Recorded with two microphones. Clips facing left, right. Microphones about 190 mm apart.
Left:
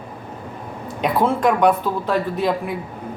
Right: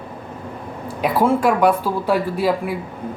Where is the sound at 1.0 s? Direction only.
5° right (ahead or behind).